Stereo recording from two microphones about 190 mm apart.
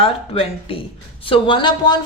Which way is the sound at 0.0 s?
30° left (ahead or behind).